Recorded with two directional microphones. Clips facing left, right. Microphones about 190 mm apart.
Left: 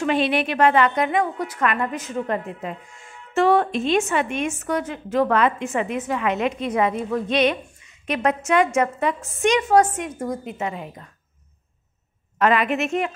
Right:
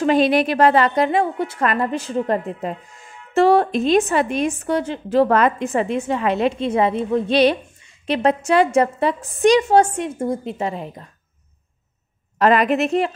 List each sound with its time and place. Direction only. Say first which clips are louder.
0.0 s a woman's voice: right 5 dB; 40° right (ahead or behind)
12.4 s a woman's voice: right 4 dB; 35° right (ahead or behind)